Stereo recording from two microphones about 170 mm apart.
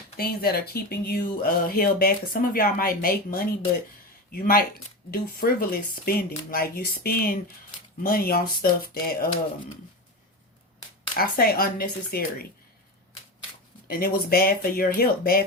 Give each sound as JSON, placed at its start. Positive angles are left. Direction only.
{"t": 0.2, "sound": "speech", "side_deg": 60}
{"t": 11.1, "sound": "speech", "side_deg": 60}
{"t": 13.8, "sound": "speech", "side_deg": 60}